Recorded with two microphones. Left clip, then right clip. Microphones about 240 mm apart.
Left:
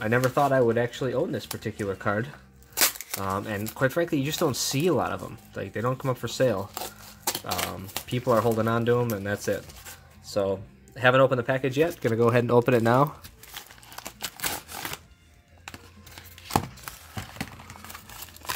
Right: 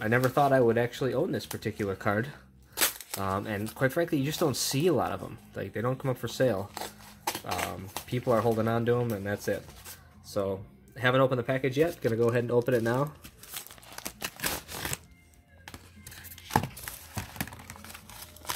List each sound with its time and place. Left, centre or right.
0.2 s speech: centre
2.7 s a sound: centre
3.2 s speech: centre
12.2 s speech: left